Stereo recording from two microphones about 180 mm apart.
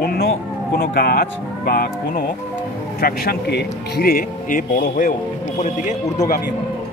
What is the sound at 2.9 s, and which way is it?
Speech, 60° left (ahead or behind).